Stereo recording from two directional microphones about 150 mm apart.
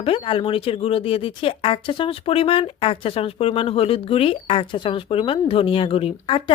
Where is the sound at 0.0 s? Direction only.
35° left (ahead or behind).